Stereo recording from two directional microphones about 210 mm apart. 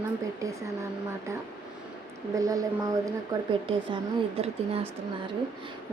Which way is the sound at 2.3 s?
15° right (ahead or behind).